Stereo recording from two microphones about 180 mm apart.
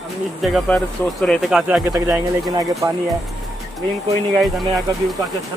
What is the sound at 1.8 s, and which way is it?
Speech, 15° right (ahead or behind).